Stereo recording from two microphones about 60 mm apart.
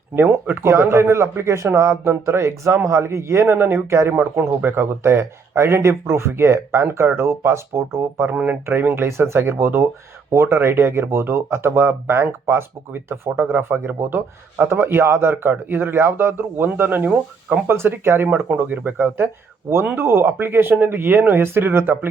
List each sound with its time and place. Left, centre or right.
0.6 s speech: right
4.1 s speech: right
4.4 s speech: right
8.3 s speech: right
8.9 s speech: right